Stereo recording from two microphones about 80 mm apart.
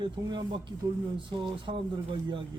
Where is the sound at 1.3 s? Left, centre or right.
Right.